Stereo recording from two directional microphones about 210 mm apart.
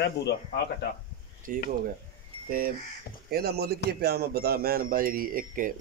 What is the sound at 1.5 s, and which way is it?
A man's voice, 40° right (ahead or behind).